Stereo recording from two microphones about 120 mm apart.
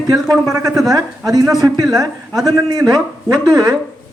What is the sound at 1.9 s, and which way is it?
Speech, centre (ahead or behind).